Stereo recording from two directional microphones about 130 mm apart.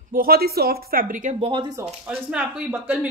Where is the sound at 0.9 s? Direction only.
90° right.